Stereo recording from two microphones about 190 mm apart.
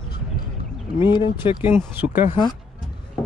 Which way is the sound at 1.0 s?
25° left (ahead or behind).